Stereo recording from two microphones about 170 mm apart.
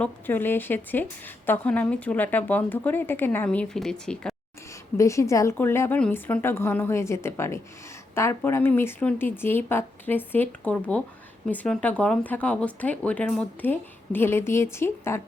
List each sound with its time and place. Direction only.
0.0 s speech: 10° left (ahead or behind)
4.9 s speech: 15° left (ahead or behind)